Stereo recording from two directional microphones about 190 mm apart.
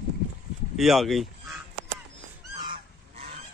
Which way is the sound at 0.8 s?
Centre (ahead or behind).